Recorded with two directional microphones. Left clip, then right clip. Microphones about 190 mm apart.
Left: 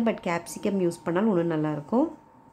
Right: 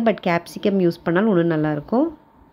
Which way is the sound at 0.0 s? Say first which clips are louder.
Right 8 dB; 20° right (ahead or behind).